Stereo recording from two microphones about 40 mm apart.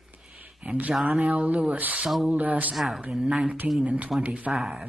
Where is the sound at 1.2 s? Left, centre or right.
Right.